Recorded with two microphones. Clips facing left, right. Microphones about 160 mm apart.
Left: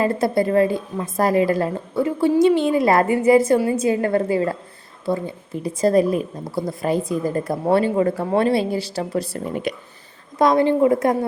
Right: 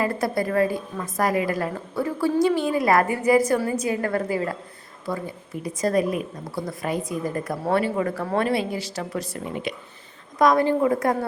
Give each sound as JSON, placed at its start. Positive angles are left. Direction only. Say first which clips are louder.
{"t": 0.0, "sound": "a woman's voice", "louder": "left 5 dB", "side_deg": 25}
{"t": 9.7, "sound": "speech", "louder": "left 5 dB", "side_deg": 45}
{"t": 10.3, "sound": "a woman's voice", "louder": "left 3 dB", "side_deg": 25}